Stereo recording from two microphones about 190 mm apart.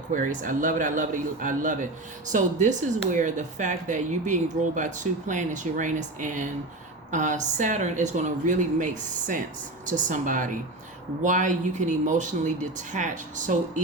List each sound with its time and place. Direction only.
0.1 s a man's voice: 45° right (ahead or behind)